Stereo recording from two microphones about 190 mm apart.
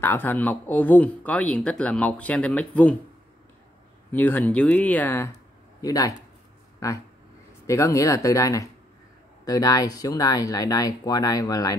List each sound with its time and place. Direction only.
0.0 s speech: 10° left (ahead or behind)
4.1 s speech: 10° left (ahead or behind)
7.6 s speech: 15° left (ahead or behind)